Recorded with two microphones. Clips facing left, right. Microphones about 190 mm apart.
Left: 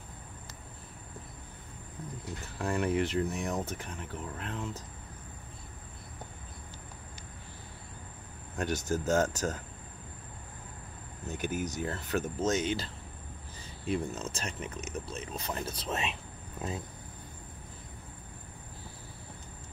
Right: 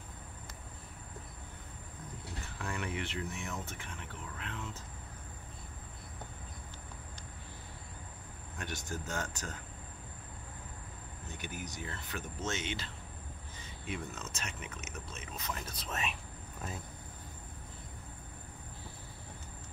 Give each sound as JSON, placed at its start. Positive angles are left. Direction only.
{"t": 2.4, "sound": "speech", "side_deg": 40}
{"t": 8.5, "sound": "speech", "side_deg": 40}
{"t": 11.2, "sound": "speech", "side_deg": 45}